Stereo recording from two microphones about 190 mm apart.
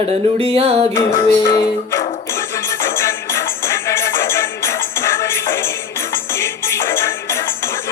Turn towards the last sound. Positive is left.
turn(degrees=15)  # may be behind; listen again after turning